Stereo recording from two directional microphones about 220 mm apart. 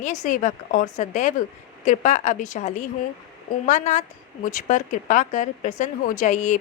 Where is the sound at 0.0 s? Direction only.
35° left (ahead or behind).